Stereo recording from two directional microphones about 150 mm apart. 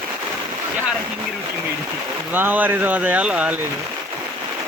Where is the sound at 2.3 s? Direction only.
10° right (ahead or behind).